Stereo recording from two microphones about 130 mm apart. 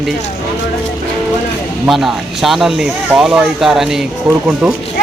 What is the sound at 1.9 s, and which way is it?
Speech, centre (ahead or behind).